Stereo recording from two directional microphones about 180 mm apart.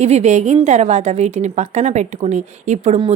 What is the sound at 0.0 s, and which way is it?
A woman's voice, 35° right (ahead or behind).